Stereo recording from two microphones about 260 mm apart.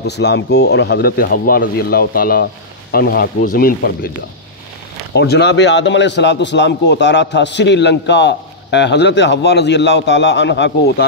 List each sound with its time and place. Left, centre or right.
0.0 s a man's voice: left
5.1 s a man's voice: left